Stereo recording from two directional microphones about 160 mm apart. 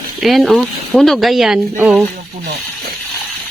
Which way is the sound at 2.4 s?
50° right (ahead or behind).